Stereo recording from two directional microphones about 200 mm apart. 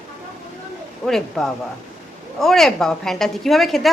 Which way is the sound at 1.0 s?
Centre (ahead or behind).